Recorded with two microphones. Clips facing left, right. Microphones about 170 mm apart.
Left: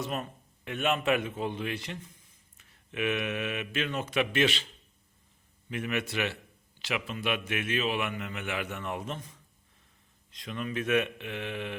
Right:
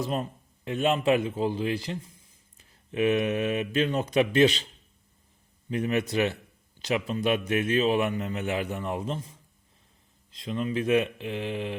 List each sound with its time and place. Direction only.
0.0 s a man's voice: 30° right (ahead or behind)
5.6 s a man's voice: 35° right (ahead or behind)